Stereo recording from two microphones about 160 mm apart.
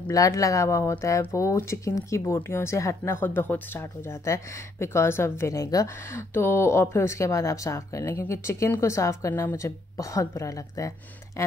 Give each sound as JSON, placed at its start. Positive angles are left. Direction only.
{"t": 0.1, "sound": "speech", "side_deg": 20}